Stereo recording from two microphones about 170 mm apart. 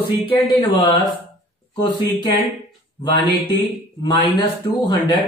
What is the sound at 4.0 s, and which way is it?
Speech, 25° left (ahead or behind).